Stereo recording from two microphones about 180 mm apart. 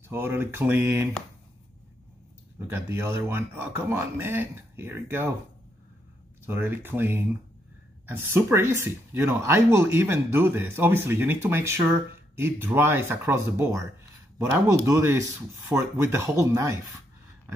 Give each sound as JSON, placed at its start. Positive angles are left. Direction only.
{"t": 0.1, "sound": "speech", "side_deg": -10}
{"t": 2.7, "sound": "speech", "side_deg": -15}
{"t": 6.4, "sound": "speech", "side_deg": -10}